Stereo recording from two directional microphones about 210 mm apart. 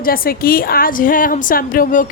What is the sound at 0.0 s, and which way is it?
A woman's voice, 45° left (ahead or behind).